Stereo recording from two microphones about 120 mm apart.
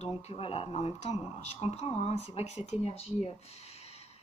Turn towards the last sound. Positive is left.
turn(degrees=60)  # may be behind; listen again after turning